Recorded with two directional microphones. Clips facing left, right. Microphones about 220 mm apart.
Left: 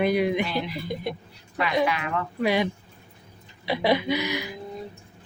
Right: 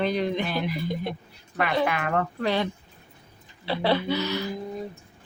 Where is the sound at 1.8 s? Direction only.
50° right (ahead or behind).